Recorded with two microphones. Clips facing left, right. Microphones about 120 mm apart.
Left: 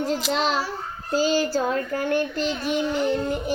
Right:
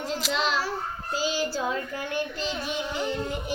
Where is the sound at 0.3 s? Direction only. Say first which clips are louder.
Left 2 dB; 55° left (ahead or behind).